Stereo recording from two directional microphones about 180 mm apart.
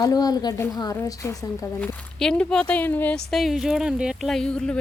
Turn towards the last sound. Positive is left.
turn(degrees=5)  # may be behind; listen again after turning